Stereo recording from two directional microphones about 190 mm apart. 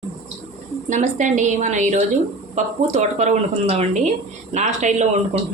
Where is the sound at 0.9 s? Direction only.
40° right (ahead or behind).